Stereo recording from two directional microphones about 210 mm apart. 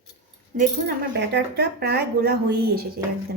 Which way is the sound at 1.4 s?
50° right (ahead or behind).